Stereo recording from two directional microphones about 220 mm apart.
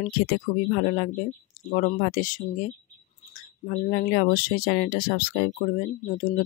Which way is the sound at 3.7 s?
40° left (ahead or behind).